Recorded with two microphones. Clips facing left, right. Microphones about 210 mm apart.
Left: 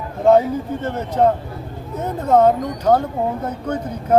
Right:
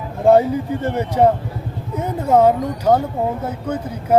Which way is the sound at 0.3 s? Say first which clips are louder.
Right 1 dB; 10° right (ahead or behind).